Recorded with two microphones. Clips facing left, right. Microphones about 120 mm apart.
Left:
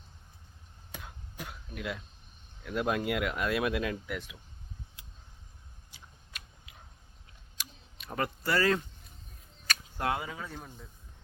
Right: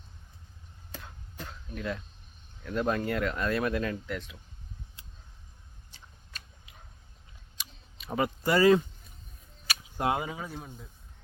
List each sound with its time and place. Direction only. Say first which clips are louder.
0.9 s chop: right 1 dB; 15° left (ahead or behind)
2.6 s speech: right 1 dB; 10° left (ahead or behind)
5.9 s a sound: even; 10° left (ahead or behind); by 8.8 s 15° right (ahead or behind)
10.0 s speech: right 4 dB; 20° right (ahead or behind)
10.6 s speech: right 2 dB; 5° right (ahead or behind)